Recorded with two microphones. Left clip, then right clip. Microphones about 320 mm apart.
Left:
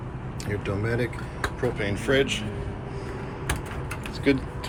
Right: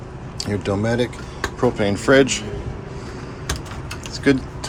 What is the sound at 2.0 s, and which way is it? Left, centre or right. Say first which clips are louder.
Speech: right 9 dB; right.